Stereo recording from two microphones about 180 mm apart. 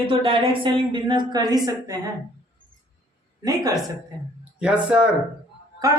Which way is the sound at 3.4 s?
20° right (ahead or behind).